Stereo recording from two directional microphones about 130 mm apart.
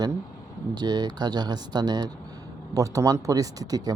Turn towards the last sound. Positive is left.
turn(degrees=-30)  # may be behind; listen again after turning